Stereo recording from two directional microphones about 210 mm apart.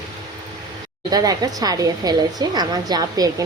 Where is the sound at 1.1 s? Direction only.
20° right (ahead or behind).